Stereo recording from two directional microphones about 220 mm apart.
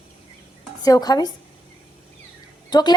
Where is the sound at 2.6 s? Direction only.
20° left (ahead or behind).